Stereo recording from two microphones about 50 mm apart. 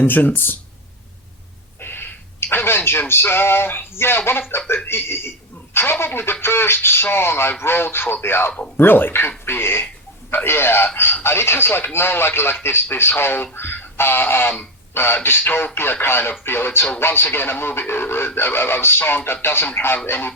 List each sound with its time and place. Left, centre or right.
0.1 s speech: left
1.8 s a sound: left
3.1 s a man's voice: left